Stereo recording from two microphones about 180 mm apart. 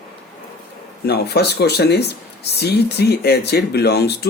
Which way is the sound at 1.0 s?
65° left (ahead or behind).